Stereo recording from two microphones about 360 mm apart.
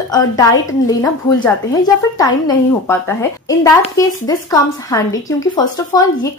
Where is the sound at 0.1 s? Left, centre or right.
Centre.